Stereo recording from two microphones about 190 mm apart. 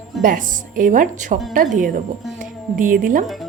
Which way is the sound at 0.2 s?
45° right (ahead or behind).